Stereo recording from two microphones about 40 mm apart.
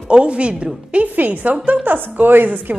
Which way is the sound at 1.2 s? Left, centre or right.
Right.